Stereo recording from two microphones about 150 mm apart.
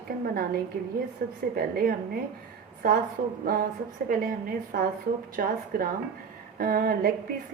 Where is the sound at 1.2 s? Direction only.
90° right.